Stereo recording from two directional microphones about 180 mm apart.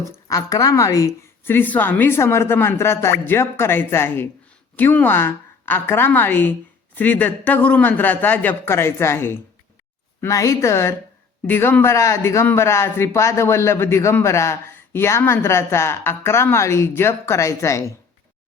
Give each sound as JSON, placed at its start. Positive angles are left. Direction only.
{"t": 0.3, "sound": "a man's voice", "side_deg": 20}